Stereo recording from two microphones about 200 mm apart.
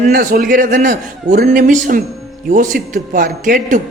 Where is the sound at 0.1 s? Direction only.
45° right (ahead or behind).